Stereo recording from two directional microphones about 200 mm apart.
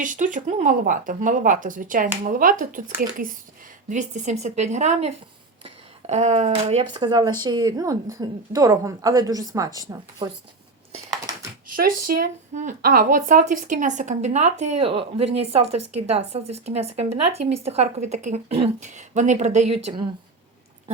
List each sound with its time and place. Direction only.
0.0 s speech: 40° right (ahead or behind)
7.0 s a woman's voice: 20° right (ahead or behind)
11.7 s speech: 45° right (ahead or behind)